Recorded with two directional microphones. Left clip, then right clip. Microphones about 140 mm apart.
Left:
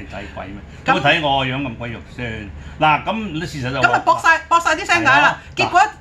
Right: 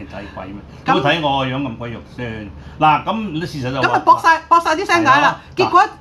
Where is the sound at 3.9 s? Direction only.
35° left (ahead or behind).